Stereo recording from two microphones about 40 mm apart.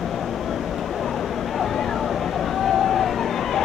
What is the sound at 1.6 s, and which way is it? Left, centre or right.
Vehicle, centre.